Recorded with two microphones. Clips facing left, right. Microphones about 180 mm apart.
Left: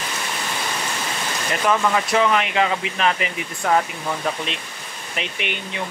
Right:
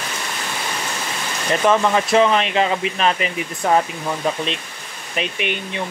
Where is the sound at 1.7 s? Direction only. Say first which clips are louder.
Right 3 dB; 25° right (ahead or behind).